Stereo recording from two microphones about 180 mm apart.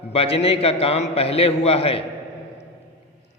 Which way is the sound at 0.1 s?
35° left (ahead or behind).